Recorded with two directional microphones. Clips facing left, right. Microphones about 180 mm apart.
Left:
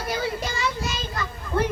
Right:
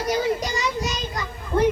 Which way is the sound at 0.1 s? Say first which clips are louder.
Right 5 dB; 20° right (ahead or behind).